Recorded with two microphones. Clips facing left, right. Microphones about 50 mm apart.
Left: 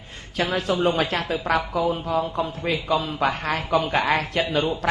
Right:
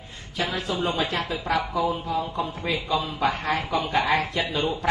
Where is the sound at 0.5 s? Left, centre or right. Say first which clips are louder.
Left 6 dB; left.